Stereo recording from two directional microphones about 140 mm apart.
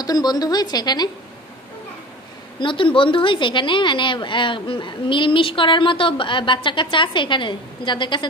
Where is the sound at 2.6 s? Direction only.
35° left (ahead or behind).